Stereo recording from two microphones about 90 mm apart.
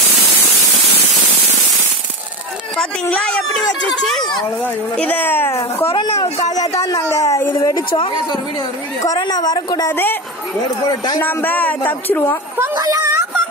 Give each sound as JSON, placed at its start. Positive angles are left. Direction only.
{"t": 3.1, "sound": "speech", "side_deg": 10}
{"t": 4.9, "sound": "a man's voice", "side_deg": 15}
{"t": 6.1, "sound": "speech", "side_deg": 40}
{"t": 9.2, "sound": "a woman's voice", "side_deg": 45}
{"t": 9.8, "sound": "a man's voice", "side_deg": 25}
{"t": 11.1, "sound": "a man's voice", "side_deg": 20}
{"t": 12.5, "sound": "speech", "side_deg": -35}